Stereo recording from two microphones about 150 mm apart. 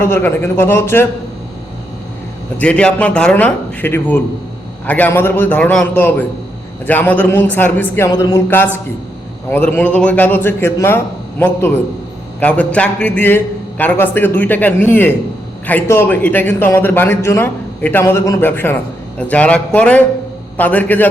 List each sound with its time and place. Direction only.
0.0 s a man's voice: 15° left (ahead or behind)
2.6 s a man's voice: 5° left (ahead or behind)